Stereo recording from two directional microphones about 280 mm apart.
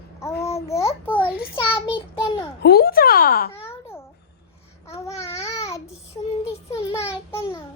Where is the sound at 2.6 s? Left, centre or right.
Left.